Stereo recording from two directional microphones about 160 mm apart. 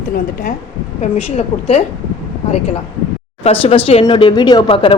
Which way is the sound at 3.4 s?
40° left (ahead or behind).